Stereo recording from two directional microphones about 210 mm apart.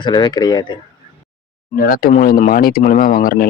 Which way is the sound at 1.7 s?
40° left (ahead or behind).